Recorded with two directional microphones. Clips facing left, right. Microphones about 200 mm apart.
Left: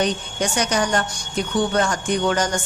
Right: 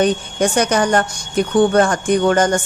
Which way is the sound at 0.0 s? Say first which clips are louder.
Right 6 dB; 55° right (ahead or behind).